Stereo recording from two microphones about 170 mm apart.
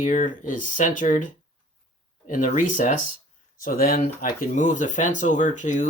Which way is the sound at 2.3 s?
50° left (ahead or behind).